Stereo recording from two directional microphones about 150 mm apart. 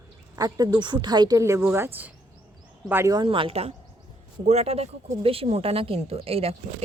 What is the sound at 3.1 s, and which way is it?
Speech, 30° right (ahead or behind).